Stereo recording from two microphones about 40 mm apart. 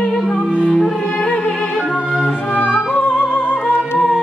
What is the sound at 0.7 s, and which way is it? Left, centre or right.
Music, centre.